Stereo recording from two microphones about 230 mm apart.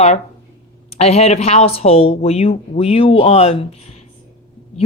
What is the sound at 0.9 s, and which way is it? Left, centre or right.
A woman's voice, left.